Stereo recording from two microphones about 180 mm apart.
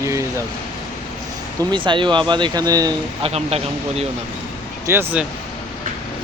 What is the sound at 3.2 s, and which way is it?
Speech, 35° right (ahead or behind).